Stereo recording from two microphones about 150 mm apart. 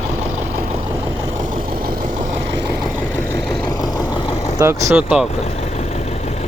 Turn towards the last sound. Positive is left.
turn(degrees=-5)  # may be behind; listen again after turning